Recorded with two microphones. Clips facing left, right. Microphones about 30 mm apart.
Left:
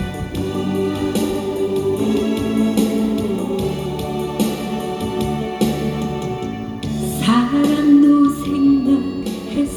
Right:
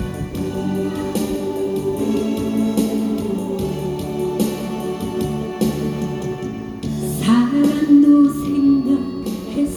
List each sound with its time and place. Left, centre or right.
0.7 s organ: left
2.7 s music: left
5.1 s music: left
7.3 s music: left